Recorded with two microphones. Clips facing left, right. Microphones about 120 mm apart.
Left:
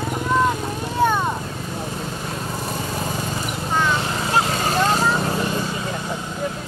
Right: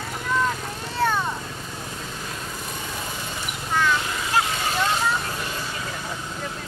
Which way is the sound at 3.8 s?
30° left (ahead or behind).